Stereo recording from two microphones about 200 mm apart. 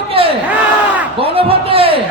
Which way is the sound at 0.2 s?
30° right (ahead or behind).